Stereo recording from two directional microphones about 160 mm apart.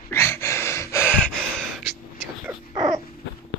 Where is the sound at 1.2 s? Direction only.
5° left (ahead or behind).